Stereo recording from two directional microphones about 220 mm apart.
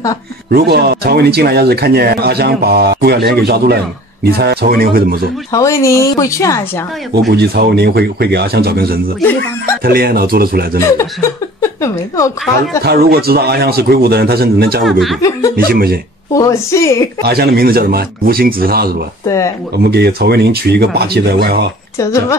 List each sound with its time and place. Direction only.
0.5 s speech: 45° right (ahead or behind)
5.5 s speech: 15° left (ahead or behind)
7.2 s speech: 45° right (ahead or behind)
11.6 s a woman's voice: 10° left (ahead or behind)
12.8 s speech: 45° right (ahead or behind)
14.9 s speech: centre (ahead or behind)
15.5 s speech: 45° right (ahead or behind)
16.3 s speech: 15° left (ahead or behind)
17.2 s speech: 45° right (ahead or behind)
19.2 s speech: 15° left (ahead or behind)
19.8 s speech: 45° right (ahead or behind)
21.9 s a woman's voice: 15° left (ahead or behind)